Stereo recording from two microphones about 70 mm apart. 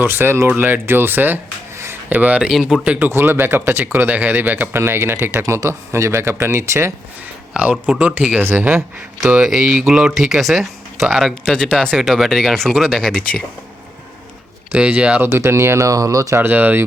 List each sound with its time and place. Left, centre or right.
0.0 s speech: right
1.7 s a sound: right
2.0 s speech: right
2.5 s speech: centre
3.0 s speech: right
4.7 s speech: right
5.6 s speech: right
7.5 s speech: centre
8.4 s speech: right
9.3 s speech: centre
14.7 s speech: centre
15.2 s speech: right
16.3 s speech: right